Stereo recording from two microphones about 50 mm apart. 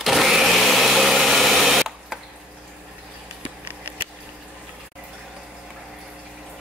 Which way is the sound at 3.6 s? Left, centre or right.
Right.